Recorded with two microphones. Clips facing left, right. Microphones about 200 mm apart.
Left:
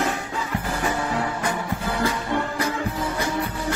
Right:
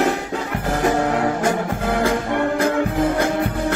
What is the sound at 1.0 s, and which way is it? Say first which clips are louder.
Music: right 6 dB; 65° right (ahead or behind).